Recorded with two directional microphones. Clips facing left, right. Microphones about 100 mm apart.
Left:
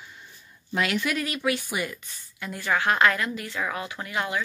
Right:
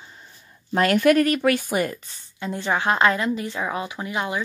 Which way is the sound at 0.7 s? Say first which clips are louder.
Right 9 dB; 50° right (ahead or behind).